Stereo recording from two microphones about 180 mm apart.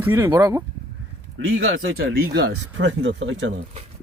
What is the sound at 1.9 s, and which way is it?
Speech, 65° right (ahead or behind).